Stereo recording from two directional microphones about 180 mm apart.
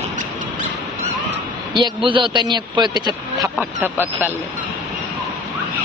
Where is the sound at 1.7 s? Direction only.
25° right (ahead or behind).